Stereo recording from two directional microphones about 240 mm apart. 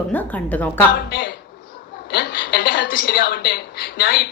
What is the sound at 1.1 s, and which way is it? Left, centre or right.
A woman's voice, left.